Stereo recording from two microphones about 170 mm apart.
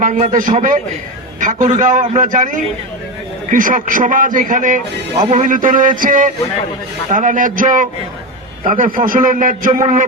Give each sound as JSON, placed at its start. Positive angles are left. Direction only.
{"t": 0.0, "sound": "a man's voice", "side_deg": -45}